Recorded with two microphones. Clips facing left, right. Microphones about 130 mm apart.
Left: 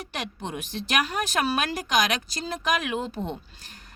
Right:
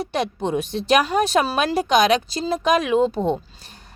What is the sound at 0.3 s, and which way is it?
A woman's voice, 35° right (ahead or behind).